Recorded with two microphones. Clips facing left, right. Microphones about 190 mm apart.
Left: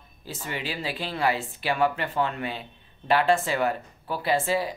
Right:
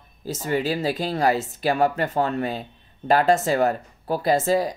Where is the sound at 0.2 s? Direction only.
40° right (ahead or behind).